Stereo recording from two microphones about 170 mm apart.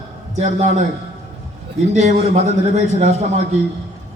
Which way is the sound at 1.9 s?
45° right (ahead or behind).